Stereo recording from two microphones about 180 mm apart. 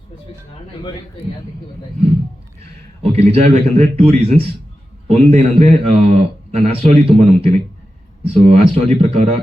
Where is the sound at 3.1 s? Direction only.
35° right (ahead or behind).